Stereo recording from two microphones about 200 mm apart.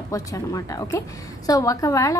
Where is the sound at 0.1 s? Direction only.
15° left (ahead or behind).